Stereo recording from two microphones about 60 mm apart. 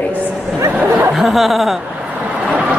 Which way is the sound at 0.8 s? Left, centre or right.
Right.